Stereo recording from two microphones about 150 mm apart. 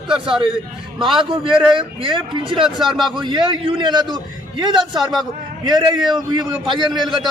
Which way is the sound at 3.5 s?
35° right (ahead or behind).